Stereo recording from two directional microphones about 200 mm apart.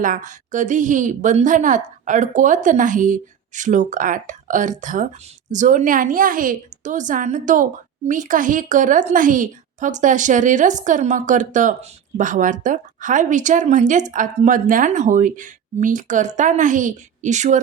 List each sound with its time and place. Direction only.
0.0 s a woman's voice: 40° right (ahead or behind)